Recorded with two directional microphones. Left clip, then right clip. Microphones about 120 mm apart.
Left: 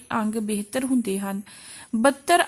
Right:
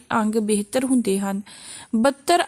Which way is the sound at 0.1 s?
40° right (ahead or behind).